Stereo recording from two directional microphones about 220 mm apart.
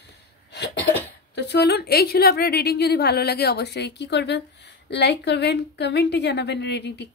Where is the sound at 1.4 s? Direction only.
50° left (ahead or behind).